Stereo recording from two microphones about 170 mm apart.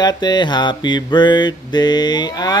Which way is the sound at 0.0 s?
25° left (ahead or behind).